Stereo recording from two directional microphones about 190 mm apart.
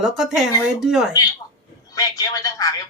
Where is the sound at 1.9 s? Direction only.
20° left (ahead or behind).